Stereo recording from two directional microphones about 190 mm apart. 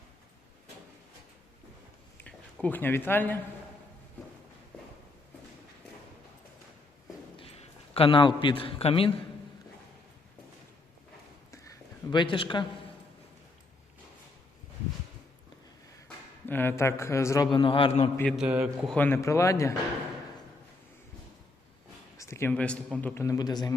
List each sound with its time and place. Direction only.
2.1 s a sound: 10° left (ahead or behind)
7.3 s a man's voice: 30° left (ahead or behind)
12.1 s speech: 25° left (ahead or behind)
16.0 s a man's voice: 10° left (ahead or behind); by 18.1 s 30° left (ahead or behind)
18.2 s a man's voice: 5° left (ahead or behind)
18.9 s speech: 10° left (ahead or behind)
22.2 s speech: 15° left (ahead or behind)